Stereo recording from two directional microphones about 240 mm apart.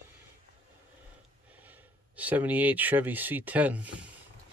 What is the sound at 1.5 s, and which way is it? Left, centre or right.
Speech, centre.